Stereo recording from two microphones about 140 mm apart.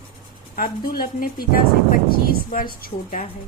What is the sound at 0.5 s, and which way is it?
A woman's voice, 90° left.